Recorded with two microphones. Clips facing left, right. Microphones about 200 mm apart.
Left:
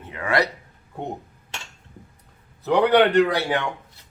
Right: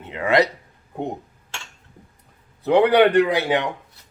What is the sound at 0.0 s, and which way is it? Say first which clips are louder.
Speech: right 4 dB; 25° right (ahead or behind).